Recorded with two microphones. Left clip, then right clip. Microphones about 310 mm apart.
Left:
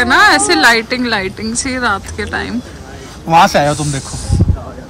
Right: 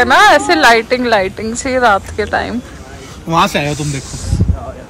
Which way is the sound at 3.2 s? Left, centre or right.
Left.